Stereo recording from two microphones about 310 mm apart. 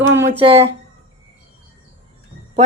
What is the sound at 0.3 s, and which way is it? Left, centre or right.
Speech, centre.